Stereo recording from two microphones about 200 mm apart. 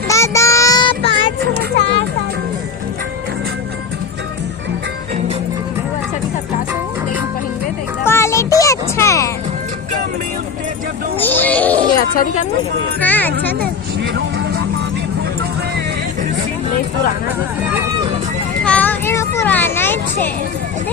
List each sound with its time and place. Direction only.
0.1 s child singing: 15° left (ahead or behind)
8.0 s music: 15° left (ahead or behind)
11.2 s music: 10° left (ahead or behind)
11.9 s speech: 45° left (ahead or behind)
13.0 s speech: 10° left (ahead or behind)
13.6 s vehicle: 60° right (ahead or behind)
18.6 s vehicle: 5° left (ahead or behind)